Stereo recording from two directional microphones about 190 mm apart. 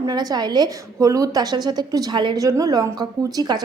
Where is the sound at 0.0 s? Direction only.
20° right (ahead or behind).